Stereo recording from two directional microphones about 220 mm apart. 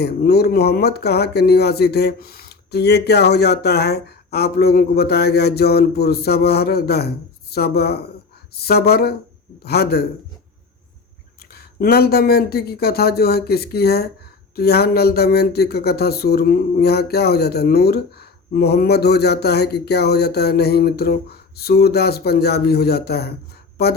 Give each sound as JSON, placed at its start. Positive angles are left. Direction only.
{"t": 0.0, "sound": "speech", "side_deg": 45}
{"t": 11.5, "sound": "speech", "side_deg": 45}